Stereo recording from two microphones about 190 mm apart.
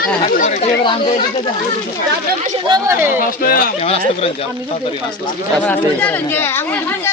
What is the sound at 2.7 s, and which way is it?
Speech, 15° right (ahead or behind).